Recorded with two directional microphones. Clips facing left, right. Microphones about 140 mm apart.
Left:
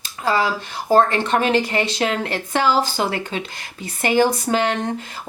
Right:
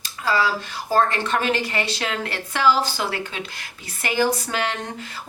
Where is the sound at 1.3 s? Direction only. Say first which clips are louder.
Left 6 dB; 30° left (ahead or behind).